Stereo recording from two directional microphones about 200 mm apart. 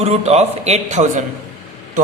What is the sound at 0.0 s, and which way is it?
Speech, 35° right (ahead or behind).